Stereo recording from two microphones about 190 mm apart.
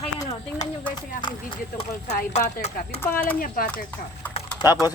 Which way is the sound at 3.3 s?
50° left (ahead or behind).